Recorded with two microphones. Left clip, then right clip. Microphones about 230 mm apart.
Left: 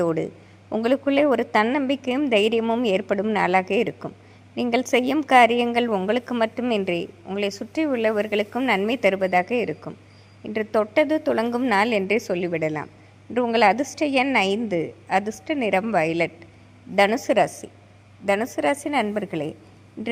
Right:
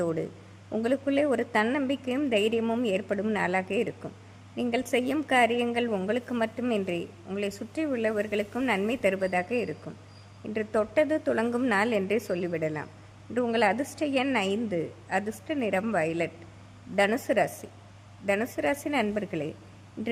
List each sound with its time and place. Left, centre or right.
0.0 s a woman's voice: centre